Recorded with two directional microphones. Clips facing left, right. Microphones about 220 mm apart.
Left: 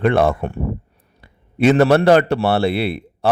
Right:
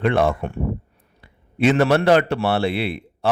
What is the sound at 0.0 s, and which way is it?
A man's voice, 45° left (ahead or behind).